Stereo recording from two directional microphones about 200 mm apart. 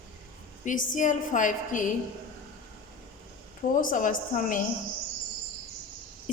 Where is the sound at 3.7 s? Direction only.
40° left (ahead or behind).